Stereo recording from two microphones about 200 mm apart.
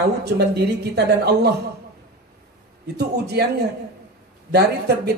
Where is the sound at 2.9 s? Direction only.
55° right (ahead or behind).